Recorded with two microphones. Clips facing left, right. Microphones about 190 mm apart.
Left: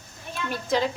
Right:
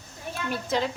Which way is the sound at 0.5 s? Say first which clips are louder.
Left 2 dB; centre (ahead or behind).